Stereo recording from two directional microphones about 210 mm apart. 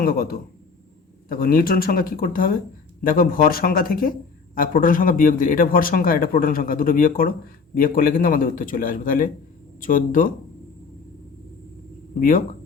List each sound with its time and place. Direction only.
0.0 s speech: 40° left (ahead or behind)
1.3 s a man's voice: 45° left (ahead or behind)